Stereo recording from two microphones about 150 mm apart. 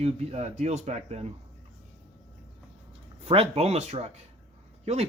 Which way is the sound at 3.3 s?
40° right (ahead or behind).